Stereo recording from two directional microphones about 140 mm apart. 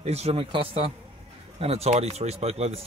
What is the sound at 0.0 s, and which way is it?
Speech, 50° right (ahead or behind).